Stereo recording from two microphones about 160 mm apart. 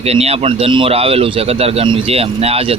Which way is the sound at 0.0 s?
40° right (ahead or behind).